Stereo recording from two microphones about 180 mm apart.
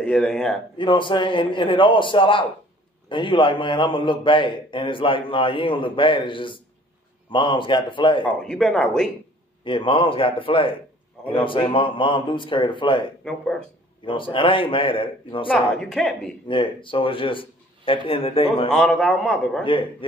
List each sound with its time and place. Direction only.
0.0 s a man's voice: 5° left (ahead or behind)
0.7 s a man's voice: 25° left (ahead or behind)
8.4 s a man's voice: 5° left (ahead or behind)
9.7 s a man's voice: 30° left (ahead or behind)
13.2 s a man's voice: 5° left (ahead or behind)
14.0 s a man's voice: 30° left (ahead or behind)
15.5 s a man's voice: 5° left (ahead or behind)
16.4 s a man's voice: 25° left (ahead or behind)
18.7 s a man's voice: 5° left (ahead or behind)
19.6 s a man's voice: 30° left (ahead or behind)